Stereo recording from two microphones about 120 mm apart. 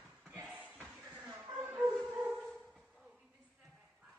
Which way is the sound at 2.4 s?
5° right (ahead or behind).